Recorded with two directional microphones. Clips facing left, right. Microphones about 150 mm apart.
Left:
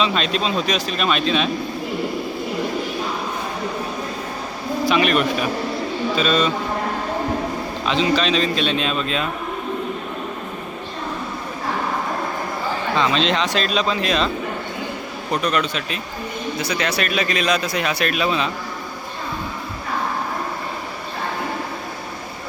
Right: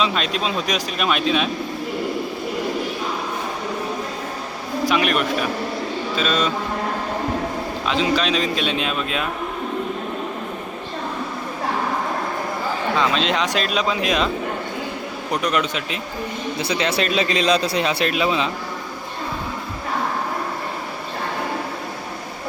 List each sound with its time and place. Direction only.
0.0 s speech: 5° right (ahead or behind)
4.9 s speech: 5° right (ahead or behind)
7.9 s a man's voice: 5° right (ahead or behind)
13.0 s a man's voice: 5° right (ahead or behind)
15.3 s a man's voice: 15° right (ahead or behind)